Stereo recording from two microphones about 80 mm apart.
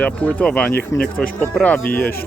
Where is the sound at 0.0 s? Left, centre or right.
Centre.